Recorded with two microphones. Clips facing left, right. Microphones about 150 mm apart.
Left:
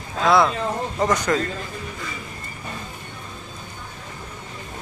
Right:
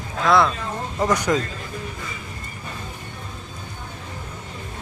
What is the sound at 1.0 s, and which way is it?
Speech, 10° right (ahead or behind).